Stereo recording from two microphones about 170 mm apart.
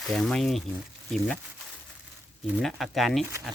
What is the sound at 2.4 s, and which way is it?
Speech, centre (ahead or behind).